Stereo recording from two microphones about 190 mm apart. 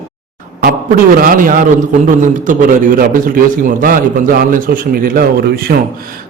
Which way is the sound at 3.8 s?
45° right (ahead or behind).